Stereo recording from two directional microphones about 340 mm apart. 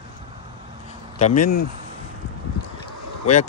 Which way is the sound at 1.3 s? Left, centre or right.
Left.